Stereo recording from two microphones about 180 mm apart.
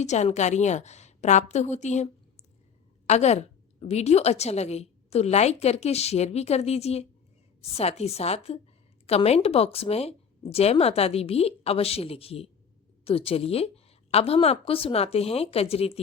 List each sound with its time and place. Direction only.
0.0 s a woman's voice: 40° left (ahead or behind)
3.1 s a woman's voice: 40° left (ahead or behind)